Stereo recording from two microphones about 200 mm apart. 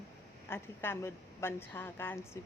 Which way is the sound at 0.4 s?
10° left (ahead or behind).